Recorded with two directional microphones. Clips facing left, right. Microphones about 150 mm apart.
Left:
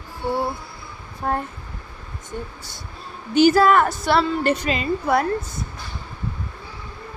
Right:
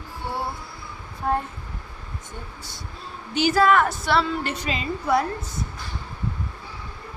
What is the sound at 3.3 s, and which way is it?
A woman's voice, 45° left (ahead or behind).